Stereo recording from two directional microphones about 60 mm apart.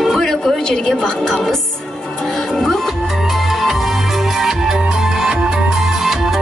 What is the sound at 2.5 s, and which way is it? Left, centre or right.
Music, centre.